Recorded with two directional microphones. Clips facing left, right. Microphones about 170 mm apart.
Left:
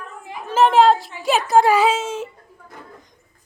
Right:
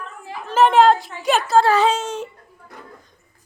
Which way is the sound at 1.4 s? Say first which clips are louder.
Left 1 dB; 20° left (ahead or behind).